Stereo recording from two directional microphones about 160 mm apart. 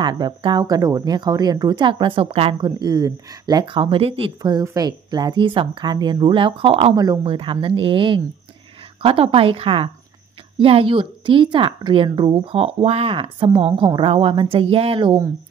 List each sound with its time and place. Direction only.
0.0 s speech: 25° right (ahead or behind)
2.6 s speech: 25° right (ahead or behind)